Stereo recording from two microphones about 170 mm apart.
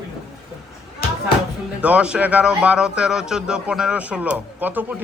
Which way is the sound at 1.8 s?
5° right (ahead or behind).